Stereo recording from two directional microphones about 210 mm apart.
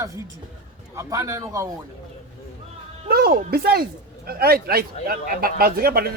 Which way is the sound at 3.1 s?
45° right (ahead or behind).